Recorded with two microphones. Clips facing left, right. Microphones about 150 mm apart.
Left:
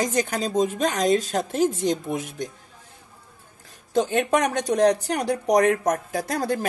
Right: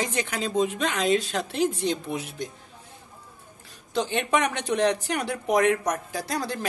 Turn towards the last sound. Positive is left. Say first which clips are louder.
# left 4 dB
turn(degrees=45)  # may be behind; listen again after turning